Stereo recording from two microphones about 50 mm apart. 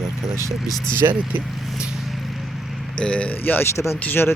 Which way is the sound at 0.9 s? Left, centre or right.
Right.